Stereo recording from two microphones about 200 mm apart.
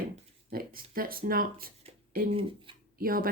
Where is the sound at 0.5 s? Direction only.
45° right (ahead or behind).